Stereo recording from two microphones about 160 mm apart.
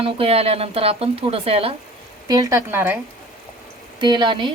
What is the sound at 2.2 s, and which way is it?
Speech, 20° right (ahead or behind).